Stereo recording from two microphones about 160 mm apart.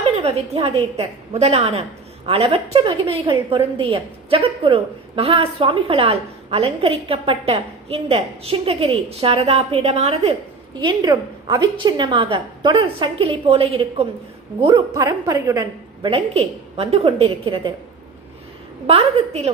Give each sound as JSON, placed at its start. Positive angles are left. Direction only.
{"t": 0.2, "sound": "a woman's voice", "side_deg": -40}
{"t": 10.8, "sound": "a woman's voice", "side_deg": -25}
{"t": 16.0, "sound": "a woman's voice", "side_deg": -35}
{"t": 18.9, "sound": "a woman's voice", "side_deg": -40}